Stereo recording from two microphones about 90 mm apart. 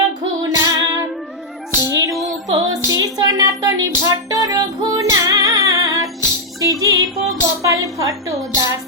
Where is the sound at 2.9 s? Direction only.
45° right (ahead or behind).